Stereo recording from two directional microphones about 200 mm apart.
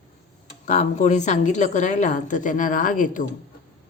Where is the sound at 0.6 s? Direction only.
35° left (ahead or behind).